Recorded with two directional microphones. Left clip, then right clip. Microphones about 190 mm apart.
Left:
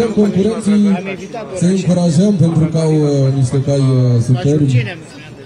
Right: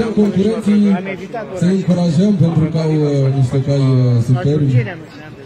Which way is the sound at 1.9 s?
50° left (ahead or behind).